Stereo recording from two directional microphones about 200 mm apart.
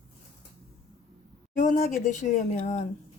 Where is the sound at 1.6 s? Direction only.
40° left (ahead or behind).